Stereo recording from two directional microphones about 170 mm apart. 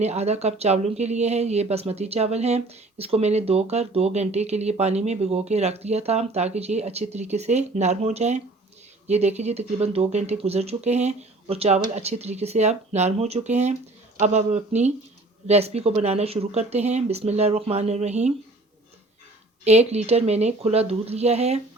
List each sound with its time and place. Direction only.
0.0 s speech: 40° right (ahead or behind)
19.6 s speech: 40° right (ahead or behind)